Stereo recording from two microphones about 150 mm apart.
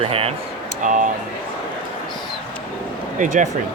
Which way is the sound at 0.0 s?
40° right (ahead or behind).